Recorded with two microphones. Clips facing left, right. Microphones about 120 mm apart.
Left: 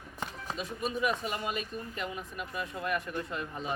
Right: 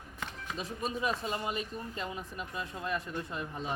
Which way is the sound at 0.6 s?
30° right (ahead or behind).